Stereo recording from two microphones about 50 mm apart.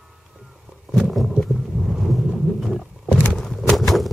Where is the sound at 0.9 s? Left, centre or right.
Centre.